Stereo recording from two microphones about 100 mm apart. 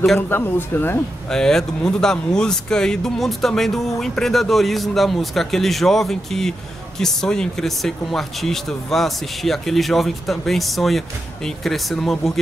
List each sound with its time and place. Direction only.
0.3 s speech: 20° left (ahead or behind)
1.3 s speech: 5° left (ahead or behind)